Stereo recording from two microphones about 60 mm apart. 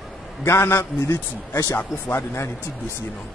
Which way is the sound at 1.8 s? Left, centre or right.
Left.